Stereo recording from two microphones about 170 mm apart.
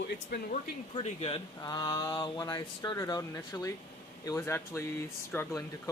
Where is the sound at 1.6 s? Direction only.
25° left (ahead or behind).